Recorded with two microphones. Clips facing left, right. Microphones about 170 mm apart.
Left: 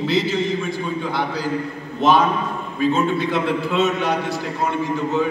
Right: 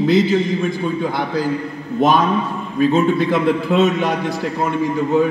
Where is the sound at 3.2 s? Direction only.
45° right (ahead or behind).